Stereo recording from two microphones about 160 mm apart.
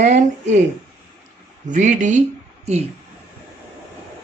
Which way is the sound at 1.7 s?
50° right (ahead or behind).